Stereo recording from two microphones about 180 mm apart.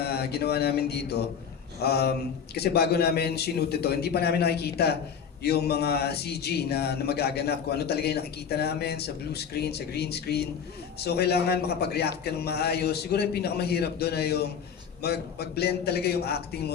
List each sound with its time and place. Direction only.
0.0 s a man's voice: 60° left (ahead or behind)